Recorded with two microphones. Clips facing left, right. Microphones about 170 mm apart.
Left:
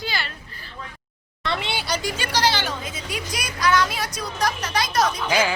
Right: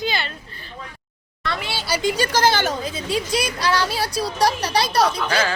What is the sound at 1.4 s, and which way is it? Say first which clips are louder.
Speech: left 1 dB; 25° left (ahead or behind).